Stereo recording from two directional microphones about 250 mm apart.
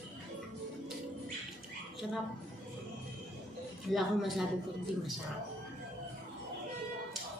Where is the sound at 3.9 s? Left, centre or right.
Centre.